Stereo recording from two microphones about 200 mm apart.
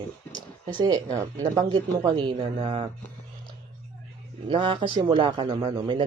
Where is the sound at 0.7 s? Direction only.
20° right (ahead or behind).